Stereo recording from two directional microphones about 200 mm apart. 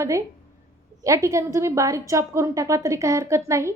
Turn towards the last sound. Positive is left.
turn(degrees=-15)  # may be behind; listen again after turning